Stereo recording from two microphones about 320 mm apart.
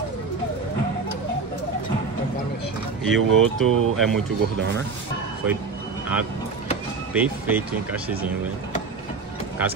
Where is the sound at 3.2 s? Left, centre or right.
Right.